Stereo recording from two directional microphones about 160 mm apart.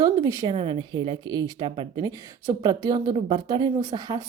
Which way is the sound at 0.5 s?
30° right (ahead or behind).